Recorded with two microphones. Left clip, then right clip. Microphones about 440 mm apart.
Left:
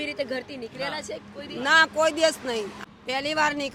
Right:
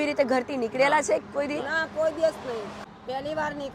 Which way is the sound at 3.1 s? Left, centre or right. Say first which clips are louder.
Left 5 dB; left.